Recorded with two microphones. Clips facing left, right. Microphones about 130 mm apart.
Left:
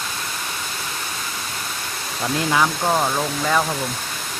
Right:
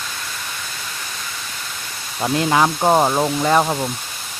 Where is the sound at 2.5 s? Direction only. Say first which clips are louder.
Right 5 dB; 30° right (ahead or behind).